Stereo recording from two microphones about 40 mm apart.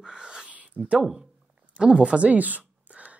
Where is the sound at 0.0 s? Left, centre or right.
Right.